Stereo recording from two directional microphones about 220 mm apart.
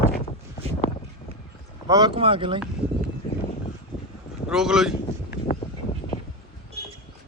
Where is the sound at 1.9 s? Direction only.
20° right (ahead or behind).